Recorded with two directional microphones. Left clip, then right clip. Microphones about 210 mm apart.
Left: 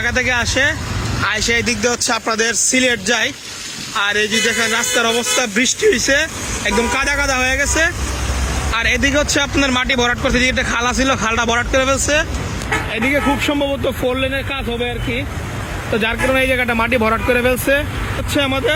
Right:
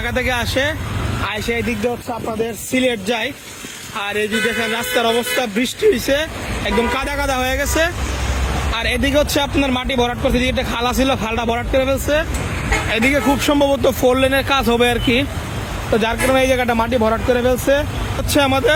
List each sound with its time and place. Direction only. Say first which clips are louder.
0.0 s speech: left 3 dB; 10° right (ahead or behind)
13.4 s speech: right 3 dB; 15° right (ahead or behind); by 15.2 s 30° right (ahead or behind)
15.9 s speech: right 1 dB; 10° right (ahead or behind)